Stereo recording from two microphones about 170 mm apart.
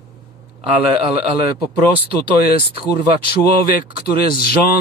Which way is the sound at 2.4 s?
65° left (ahead or behind).